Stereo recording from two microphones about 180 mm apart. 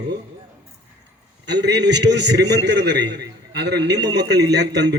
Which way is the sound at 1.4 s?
70° right (ahead or behind).